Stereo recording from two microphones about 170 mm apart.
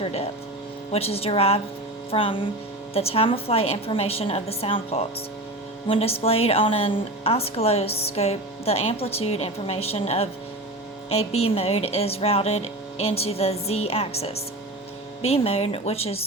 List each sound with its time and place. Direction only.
0.0 s speech: 35° left (ahead or behind)